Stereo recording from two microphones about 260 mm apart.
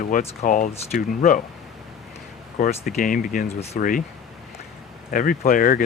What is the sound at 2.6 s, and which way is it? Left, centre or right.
Speech, left.